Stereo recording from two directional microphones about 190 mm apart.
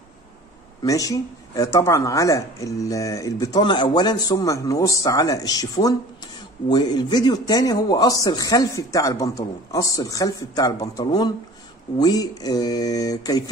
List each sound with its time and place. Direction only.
0.8 s speech: 15° left (ahead or behind)